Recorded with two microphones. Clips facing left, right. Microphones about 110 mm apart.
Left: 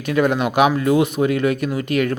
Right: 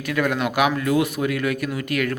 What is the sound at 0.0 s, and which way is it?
Speech, 25° left (ahead or behind).